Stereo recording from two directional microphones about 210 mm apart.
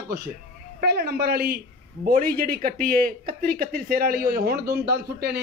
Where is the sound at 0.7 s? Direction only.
50° right (ahead or behind).